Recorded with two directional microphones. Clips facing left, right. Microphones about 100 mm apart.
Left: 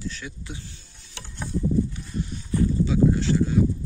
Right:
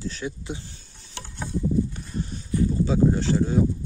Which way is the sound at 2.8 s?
35° right (ahead or behind).